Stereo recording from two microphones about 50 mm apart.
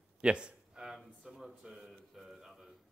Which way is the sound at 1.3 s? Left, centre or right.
Centre.